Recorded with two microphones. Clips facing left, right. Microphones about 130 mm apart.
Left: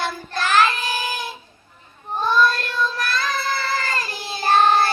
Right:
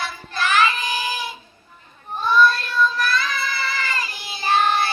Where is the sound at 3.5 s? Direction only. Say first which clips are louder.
Left 3 dB; 40° left (ahead or behind).